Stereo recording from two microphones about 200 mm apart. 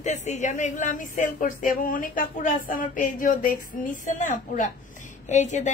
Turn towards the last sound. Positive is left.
turn(degrees=35)  # may be behind; listen again after turning